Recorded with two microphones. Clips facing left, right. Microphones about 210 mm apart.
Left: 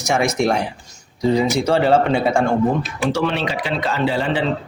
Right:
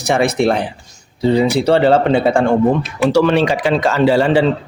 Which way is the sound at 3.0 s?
75° right (ahead or behind).